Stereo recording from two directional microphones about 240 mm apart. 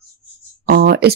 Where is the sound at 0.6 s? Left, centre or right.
Right.